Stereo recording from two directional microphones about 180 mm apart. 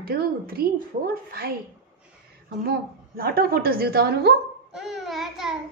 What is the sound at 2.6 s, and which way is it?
A woman's voice, 55° right (ahead or behind).